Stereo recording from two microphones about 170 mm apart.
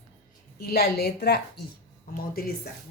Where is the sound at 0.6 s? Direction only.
65° left (ahead or behind).